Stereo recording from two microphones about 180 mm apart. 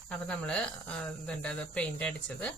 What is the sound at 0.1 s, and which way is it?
Speech, 5° left (ahead or behind).